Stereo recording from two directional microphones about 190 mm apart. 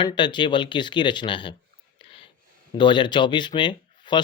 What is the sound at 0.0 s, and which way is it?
Speech, 25° left (ahead or behind).